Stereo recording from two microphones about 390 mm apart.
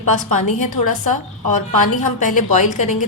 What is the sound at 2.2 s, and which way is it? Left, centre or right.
Speech, centre.